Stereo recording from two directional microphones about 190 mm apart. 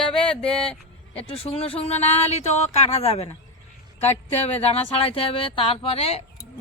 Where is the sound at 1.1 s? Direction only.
30° left (ahead or behind).